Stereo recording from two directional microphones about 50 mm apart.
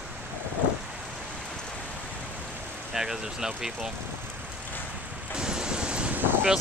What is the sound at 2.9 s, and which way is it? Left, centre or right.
Speech, centre.